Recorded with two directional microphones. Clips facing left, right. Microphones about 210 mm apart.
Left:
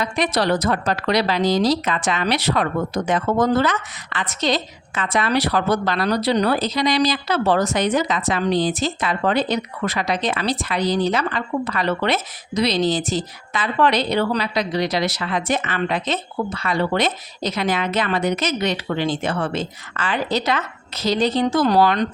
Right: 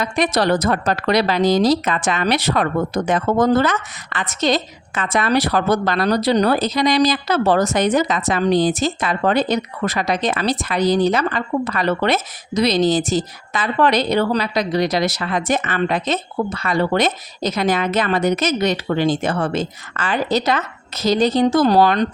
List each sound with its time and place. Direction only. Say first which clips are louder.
0.0 s a woman's voice: right 2 dB; 45° right (ahead or behind)